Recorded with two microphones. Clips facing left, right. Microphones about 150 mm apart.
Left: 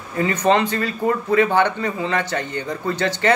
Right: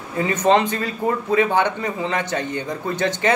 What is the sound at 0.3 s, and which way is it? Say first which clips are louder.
A man's voice: right 1 dB; 20° right (ahead or behind).